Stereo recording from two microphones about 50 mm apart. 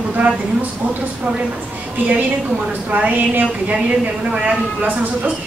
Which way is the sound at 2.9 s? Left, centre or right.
Right.